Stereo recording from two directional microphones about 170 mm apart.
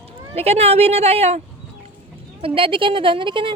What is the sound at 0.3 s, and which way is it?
A woman's voice, 35° right (ahead or behind).